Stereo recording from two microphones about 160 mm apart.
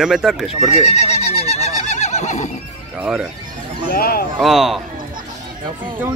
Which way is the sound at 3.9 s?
70° left (ahead or behind).